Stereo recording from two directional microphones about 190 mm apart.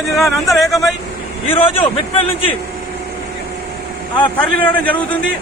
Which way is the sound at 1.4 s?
30° left (ahead or behind).